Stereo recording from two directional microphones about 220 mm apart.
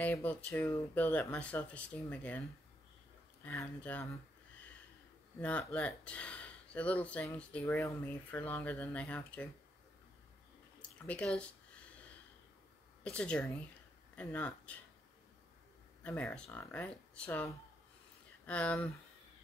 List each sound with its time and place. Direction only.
0.0 s speech: 10° left (ahead or behind)
3.4 s speech: 10° left (ahead or behind)
5.4 s speech: 5° left (ahead or behind)
10.8 s drip: 5° left (ahead or behind)
13.0 s speech: 5° left (ahead or behind)
16.0 s speech: 5° left (ahead or behind)
18.5 s speech: 5° left (ahead or behind)